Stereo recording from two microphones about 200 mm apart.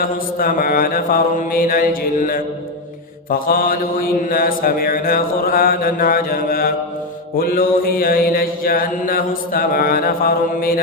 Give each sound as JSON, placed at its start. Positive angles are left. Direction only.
{"t": 0.0, "sound": "mantra", "side_deg": 45}